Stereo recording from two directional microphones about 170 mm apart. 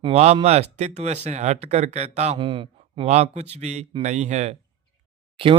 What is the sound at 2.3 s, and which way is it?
Speech, 30° right (ahead or behind).